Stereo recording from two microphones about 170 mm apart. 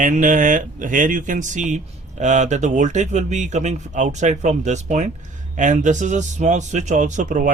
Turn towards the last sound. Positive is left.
turn(degrees=-45)  # may be behind; listen again after turning